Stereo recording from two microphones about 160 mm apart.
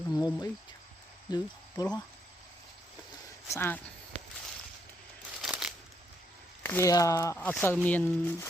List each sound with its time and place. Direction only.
0.0 s speech: 20° left (ahead or behind)
3.5 s speech: 15° left (ahead or behind)
5.4 s crumpling: 5° right (ahead or behind)
6.6 s speech: 15° left (ahead or behind)